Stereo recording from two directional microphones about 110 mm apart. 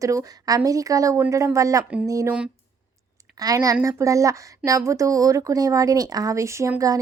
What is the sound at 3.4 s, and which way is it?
A woman's voice, 35° right (ahead or behind).